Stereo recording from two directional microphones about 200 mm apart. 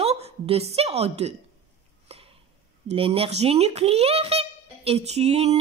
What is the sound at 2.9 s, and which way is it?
A child's voice, 30° right (ahead or behind).